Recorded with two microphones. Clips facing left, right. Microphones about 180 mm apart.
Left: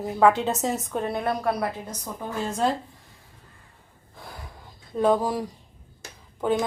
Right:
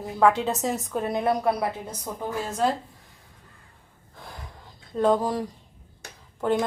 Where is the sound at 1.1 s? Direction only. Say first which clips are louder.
Right 4 dB; 15° right (ahead or behind).